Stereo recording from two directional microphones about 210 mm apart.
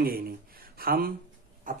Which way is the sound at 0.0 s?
45° right (ahead or behind).